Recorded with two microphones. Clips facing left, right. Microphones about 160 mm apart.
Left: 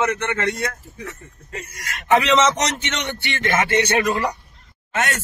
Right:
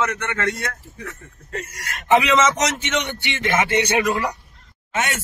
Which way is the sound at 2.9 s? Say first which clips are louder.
Right 2 dB; 10° right (ahead or behind).